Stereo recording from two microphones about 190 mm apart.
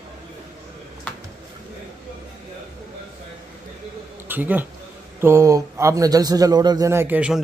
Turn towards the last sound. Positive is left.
turn(degrees=-5)  # may be behind; listen again after turning